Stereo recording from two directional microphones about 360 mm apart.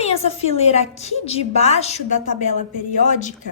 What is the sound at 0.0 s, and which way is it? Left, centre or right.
A woman's voice, centre.